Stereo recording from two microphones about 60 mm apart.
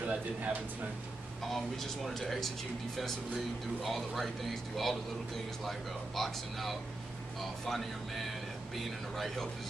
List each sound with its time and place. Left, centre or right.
0.0 s speech: right
1.5 s speech: centre
3.8 s speech: centre